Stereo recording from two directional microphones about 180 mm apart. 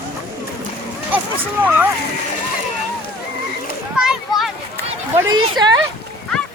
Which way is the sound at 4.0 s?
Centre (ahead or behind).